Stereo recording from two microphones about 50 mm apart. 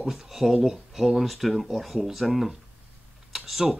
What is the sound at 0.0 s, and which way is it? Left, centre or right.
Speech, centre.